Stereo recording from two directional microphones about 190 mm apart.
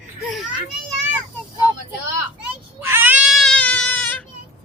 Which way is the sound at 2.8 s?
10° right (ahead or behind).